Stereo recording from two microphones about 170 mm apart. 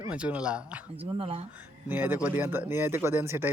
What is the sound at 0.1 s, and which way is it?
Speech, 5° right (ahead or behind).